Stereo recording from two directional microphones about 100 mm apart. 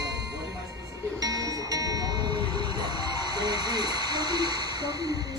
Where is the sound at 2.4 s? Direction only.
65° left (ahead or behind).